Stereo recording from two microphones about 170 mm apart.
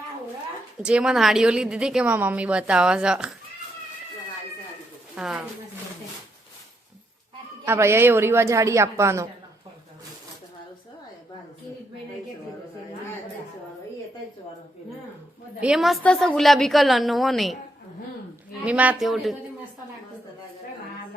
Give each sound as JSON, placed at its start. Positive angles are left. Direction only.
{"t": 0.8, "sound": "a woman's voice", "side_deg": -5}
{"t": 5.1, "sound": "speech", "side_deg": -5}
{"t": 7.6, "sound": "a woman's voice", "side_deg": -15}
{"t": 15.6, "sound": "a woman's voice", "side_deg": 0}
{"t": 18.6, "sound": "a woman's voice", "side_deg": -10}